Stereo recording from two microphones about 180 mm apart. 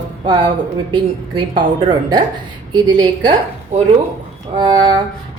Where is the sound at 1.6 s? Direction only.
25° right (ahead or behind).